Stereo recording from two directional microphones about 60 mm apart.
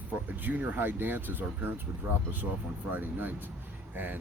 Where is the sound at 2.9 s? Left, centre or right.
Right.